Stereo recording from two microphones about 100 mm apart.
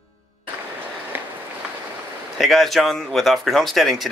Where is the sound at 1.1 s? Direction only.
20° right (ahead or behind).